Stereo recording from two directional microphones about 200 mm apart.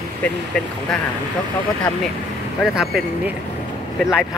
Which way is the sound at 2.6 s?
Centre (ahead or behind).